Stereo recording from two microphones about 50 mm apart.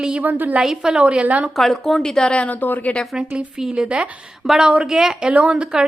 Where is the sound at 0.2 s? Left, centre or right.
Right.